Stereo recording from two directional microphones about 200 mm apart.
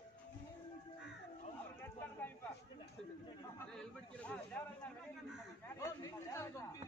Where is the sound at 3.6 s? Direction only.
5° left (ahead or behind).